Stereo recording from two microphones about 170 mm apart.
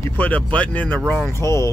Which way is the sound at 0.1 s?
10° left (ahead or behind).